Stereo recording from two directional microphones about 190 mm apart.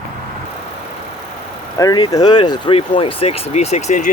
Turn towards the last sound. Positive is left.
turn(degrees=35)  # may be behind; listen again after turning